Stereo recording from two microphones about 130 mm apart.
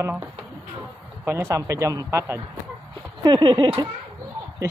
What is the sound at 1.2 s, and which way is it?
Speech, 20° right (ahead or behind).